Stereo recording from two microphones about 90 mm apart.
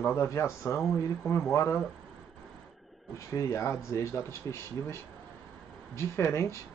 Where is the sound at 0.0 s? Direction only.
30° left (ahead or behind).